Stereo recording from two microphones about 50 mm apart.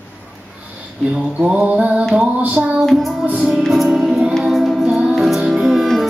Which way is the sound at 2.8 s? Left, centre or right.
Centre.